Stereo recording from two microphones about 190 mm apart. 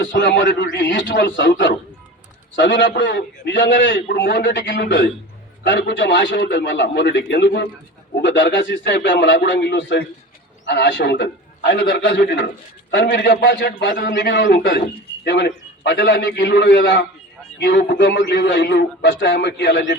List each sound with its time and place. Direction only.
0.0 s a man's voice: 75° left (ahead or behind)
13.3 s a man's voice: 55° left (ahead or behind); by 18.6 s 70° left (ahead or behind)
18.6 s a man's voice: 60° left (ahead or behind)